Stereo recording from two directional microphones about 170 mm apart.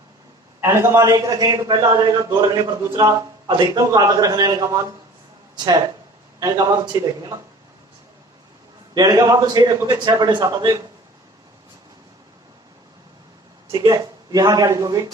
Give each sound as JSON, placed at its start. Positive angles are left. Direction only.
{"t": 0.6, "sound": "a man's voice", "side_deg": -15}
{"t": 6.4, "sound": "a man's voice", "side_deg": -20}
{"t": 9.0, "sound": "a man's voice", "side_deg": -20}
{"t": 13.7, "sound": "speech", "side_deg": -20}